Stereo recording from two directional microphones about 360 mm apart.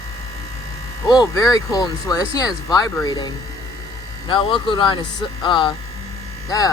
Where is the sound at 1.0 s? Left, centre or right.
Centre.